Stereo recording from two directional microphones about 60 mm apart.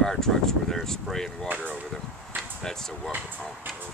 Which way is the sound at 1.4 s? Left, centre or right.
Right.